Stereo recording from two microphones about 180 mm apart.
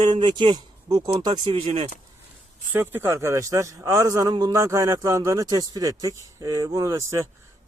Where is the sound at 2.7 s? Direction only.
10° right (ahead or behind).